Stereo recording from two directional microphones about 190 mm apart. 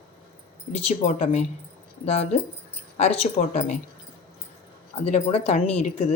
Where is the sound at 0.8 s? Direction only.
35° left (ahead or behind).